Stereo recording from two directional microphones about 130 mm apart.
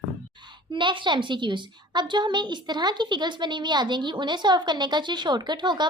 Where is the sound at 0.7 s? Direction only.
40° right (ahead or behind).